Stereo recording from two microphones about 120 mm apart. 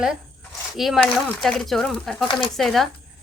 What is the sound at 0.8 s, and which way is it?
Speech, centre (ahead or behind).